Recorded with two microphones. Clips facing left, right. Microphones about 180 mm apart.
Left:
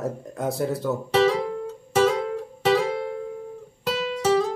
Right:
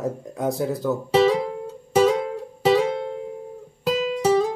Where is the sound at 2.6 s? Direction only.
15° right (ahead or behind).